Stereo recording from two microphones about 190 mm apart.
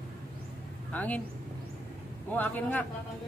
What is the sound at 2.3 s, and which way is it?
Speech, 10° left (ahead or behind).